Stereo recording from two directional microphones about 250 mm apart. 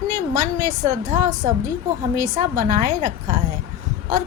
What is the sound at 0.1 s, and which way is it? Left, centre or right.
A woman's voice, right.